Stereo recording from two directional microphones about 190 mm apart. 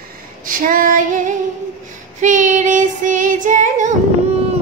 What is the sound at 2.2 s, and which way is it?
Child singing, 40° right (ahead or behind).